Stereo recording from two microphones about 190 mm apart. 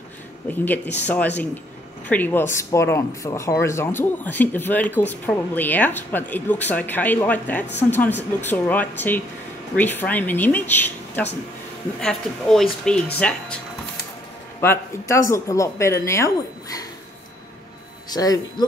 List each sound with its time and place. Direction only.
1.0 s speech: 10° left (ahead or behind)
14.6 s speech: 15° left (ahead or behind)
18.1 s speech: 20° left (ahead or behind)